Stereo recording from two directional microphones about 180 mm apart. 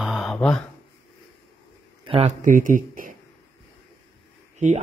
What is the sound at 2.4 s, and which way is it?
Speech, 45° right (ahead or behind).